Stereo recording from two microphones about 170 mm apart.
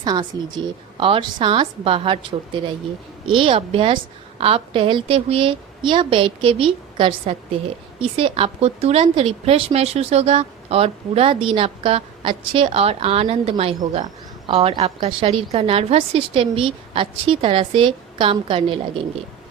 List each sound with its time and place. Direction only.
0.0 s a woman's voice: 25° right (ahead or behind)